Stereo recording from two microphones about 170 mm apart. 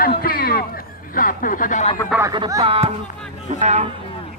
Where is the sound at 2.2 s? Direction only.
25° right (ahead or behind).